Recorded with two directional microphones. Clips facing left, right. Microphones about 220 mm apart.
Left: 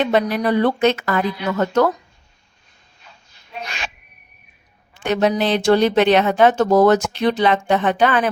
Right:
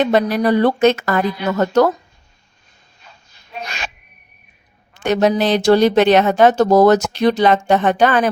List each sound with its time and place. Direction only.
0.0 s speech: 40° right (ahead or behind)
3.0 s a sound: 40° right (ahead or behind)
5.0 s speech: 40° right (ahead or behind)